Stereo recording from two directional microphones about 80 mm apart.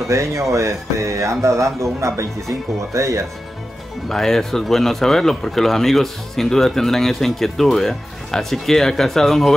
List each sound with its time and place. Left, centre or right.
0.1 s speech: right
4.1 s speech: centre